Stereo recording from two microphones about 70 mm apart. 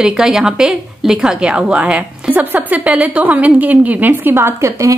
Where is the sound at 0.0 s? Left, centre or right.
Centre.